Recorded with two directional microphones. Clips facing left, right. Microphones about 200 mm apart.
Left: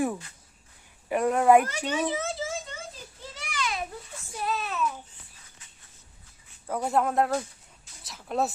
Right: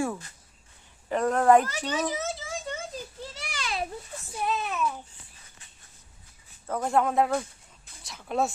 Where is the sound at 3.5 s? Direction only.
35° right (ahead or behind).